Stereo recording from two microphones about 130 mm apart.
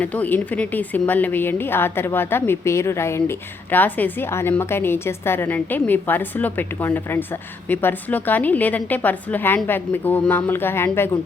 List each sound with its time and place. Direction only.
0.0 s a woman's voice: 10° left (ahead or behind)